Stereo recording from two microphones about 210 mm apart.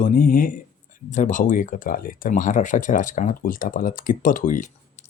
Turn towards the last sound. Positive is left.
turn(degrees=35)  # may be behind; listen again after turning